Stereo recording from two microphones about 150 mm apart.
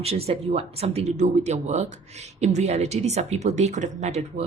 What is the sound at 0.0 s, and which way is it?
Speech, 40° right (ahead or behind).